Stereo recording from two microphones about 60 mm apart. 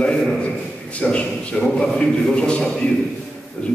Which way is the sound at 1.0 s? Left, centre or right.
Centre.